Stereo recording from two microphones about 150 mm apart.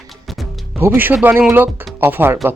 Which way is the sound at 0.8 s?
15° right (ahead or behind).